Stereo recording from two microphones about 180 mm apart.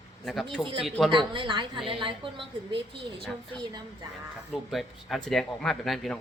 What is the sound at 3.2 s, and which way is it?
Speech, centre (ahead or behind).